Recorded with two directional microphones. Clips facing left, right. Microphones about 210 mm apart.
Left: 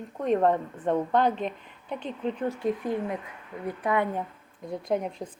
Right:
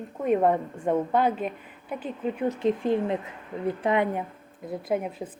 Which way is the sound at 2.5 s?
20° right (ahead or behind).